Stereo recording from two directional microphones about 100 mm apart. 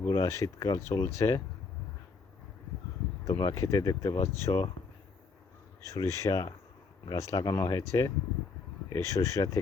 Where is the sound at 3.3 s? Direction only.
50° left (ahead or behind).